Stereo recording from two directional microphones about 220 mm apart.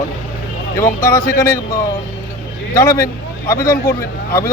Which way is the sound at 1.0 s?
15° left (ahead or behind).